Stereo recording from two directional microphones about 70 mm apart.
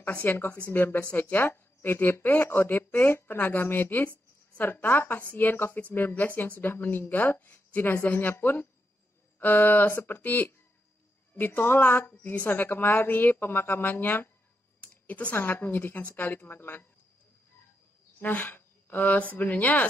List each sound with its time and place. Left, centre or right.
0.0 s a woman's voice: left
18.2 s speech: left